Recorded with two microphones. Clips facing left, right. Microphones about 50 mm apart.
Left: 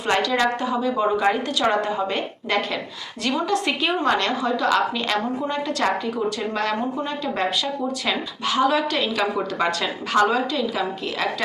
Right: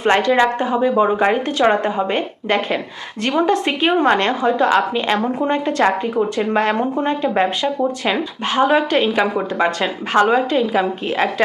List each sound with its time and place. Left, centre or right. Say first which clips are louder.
0.0 s a woman's voice: right 6 dB; right